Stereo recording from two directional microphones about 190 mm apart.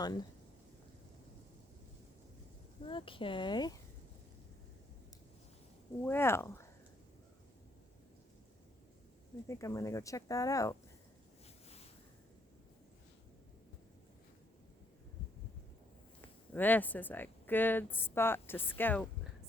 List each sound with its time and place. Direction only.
2.8 s speech: 25° left (ahead or behind)
6.0 s speech: 10° left (ahead or behind)
9.5 s speech: 15° left (ahead or behind)
16.6 s speech: 10° left (ahead or behind)